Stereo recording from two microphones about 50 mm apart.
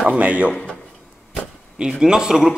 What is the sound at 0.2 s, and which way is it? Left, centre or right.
Speech, right.